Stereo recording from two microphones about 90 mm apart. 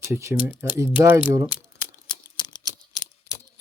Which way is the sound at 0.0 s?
30° right (ahead or behind).